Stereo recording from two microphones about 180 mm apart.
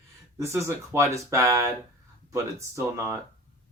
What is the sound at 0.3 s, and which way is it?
Speech, 15° right (ahead or behind).